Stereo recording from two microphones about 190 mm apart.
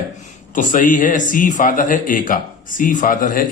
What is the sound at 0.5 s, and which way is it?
A man's voice, 40° left (ahead or behind).